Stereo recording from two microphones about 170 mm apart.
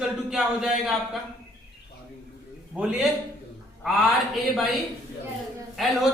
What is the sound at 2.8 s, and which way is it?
A man's voice, 5° right (ahead or behind).